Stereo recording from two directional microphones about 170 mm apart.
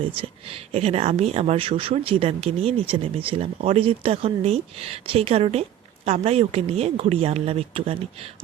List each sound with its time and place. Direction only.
0.2 s speech: 35° right (ahead or behind)